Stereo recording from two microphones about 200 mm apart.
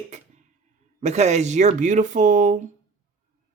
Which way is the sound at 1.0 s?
35° right (ahead or behind).